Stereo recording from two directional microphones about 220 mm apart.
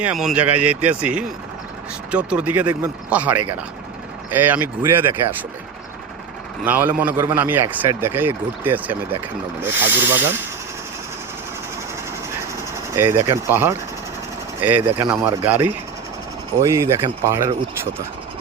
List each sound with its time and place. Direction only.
0.0 s a man's voice: 5° right (ahead or behind)
6.7 s a man's voice: 5° right (ahead or behind)
13.0 s a man's voice: 10° right (ahead or behind)
15.1 s a man's voice: 10° right (ahead or behind)